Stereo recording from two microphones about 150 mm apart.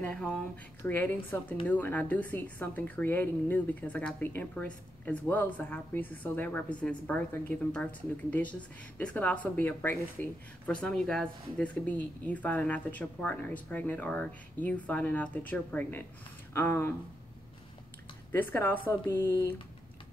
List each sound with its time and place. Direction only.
0.0 s a woman's voice: 10° left (ahead or behind)
18.3 s a woman's voice: 15° left (ahead or behind)